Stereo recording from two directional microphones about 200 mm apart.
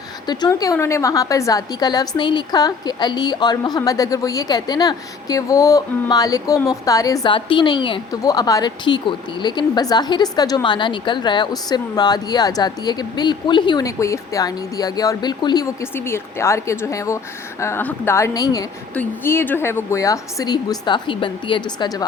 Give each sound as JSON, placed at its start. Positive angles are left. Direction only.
{"t": 0.3, "sound": "a woman's voice", "side_deg": 20}